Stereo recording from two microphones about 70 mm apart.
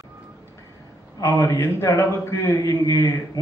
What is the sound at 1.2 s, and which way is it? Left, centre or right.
A man's voice, left.